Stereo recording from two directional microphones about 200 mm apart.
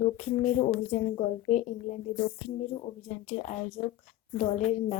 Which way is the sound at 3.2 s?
35° left (ahead or behind).